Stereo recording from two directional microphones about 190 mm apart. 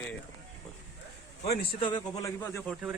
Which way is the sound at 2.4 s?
10° left (ahead or behind).